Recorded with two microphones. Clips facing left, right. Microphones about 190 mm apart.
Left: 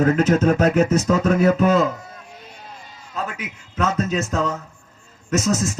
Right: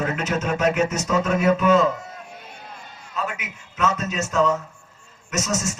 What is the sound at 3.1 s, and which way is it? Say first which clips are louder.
A man's voice: left 1 dB; 35° left (ahead or behind).